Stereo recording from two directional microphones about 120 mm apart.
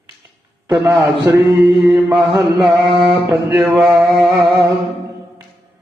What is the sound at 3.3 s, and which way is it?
Mantra, 15° right (ahead or behind).